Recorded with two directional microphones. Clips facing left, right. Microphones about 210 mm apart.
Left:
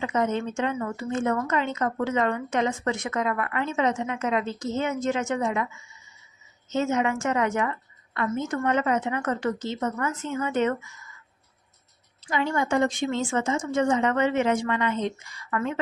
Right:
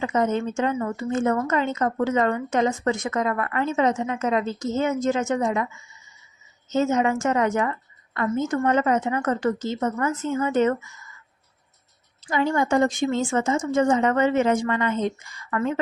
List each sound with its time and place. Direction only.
0.0 s a woman's voice: 40° right (ahead or behind)
6.7 s a woman's voice: 40° right (ahead or behind)
12.3 s a woman's voice: 40° right (ahead or behind)